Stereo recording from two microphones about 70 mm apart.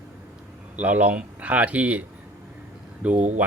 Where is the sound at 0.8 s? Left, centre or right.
Right.